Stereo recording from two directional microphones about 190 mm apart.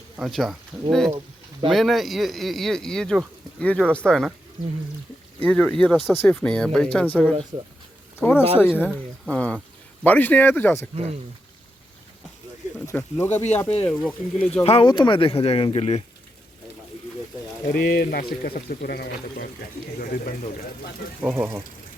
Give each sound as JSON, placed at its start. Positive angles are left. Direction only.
{"t": 0.2, "sound": "speech", "side_deg": 0}
{"t": 5.4, "sound": "speech", "side_deg": 5}
{"t": 8.9, "sound": "speech", "side_deg": -5}
{"t": 10.0, "sound": "speech", "side_deg": 10}
{"t": 10.9, "sound": "speech", "side_deg": -35}
{"t": 12.8, "sound": "speech", "side_deg": 15}
{"t": 13.3, "sound": "speech", "side_deg": 35}
{"t": 13.8, "sound": "speech", "side_deg": 5}
{"t": 14.6, "sound": "speech", "side_deg": 30}
{"t": 17.7, "sound": "speech", "side_deg": 50}
{"t": 21.2, "sound": "speech", "side_deg": -5}